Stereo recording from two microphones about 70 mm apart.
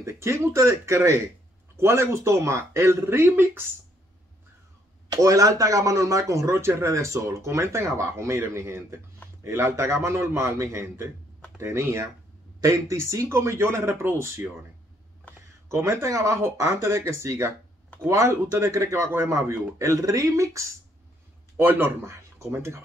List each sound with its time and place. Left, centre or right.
0.0 s speech: right
5.1 s speech: right
15.7 s speech: right
21.5 s speech: right
22.0 s speech: right